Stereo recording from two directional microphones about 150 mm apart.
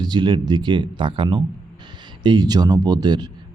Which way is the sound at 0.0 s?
30° right (ahead or behind).